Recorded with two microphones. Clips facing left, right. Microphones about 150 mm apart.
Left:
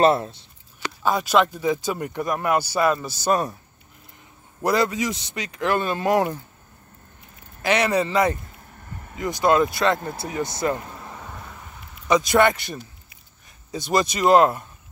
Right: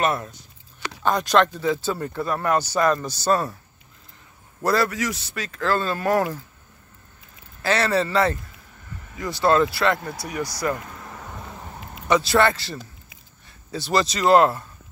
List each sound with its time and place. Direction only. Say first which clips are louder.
0.0 s a man's voice: left 6 dB; 25° left (ahead or behind)
1.0 s speech: even; 5° left (ahead or behind)
4.6 s a man's voice: left 1 dB; 15° left (ahead or behind)
7.6 s a man's voice: left 1 dB; 15° left (ahead or behind)
12.3 s a man's voice: left 1 dB; 20° left (ahead or behind)